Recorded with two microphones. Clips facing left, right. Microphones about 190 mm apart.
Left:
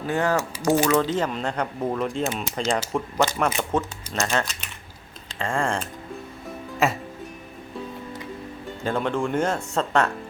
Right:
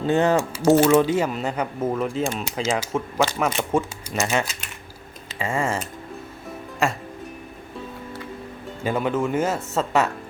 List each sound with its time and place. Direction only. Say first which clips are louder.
0.0 s speech: right 4 dB; 25° right (ahead or behind)
0.9 s speech: right 4 dB; 10° right (ahead or behind)
6.8 s speech: left 1 dB; centre (ahead or behind)
8.8 s speech: right 2 dB; 5° right (ahead or behind)